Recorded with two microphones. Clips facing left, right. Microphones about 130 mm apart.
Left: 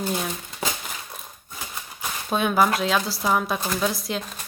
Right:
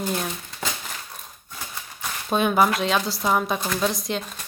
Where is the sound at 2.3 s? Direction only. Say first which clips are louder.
Right 1 dB; centre (ahead or behind).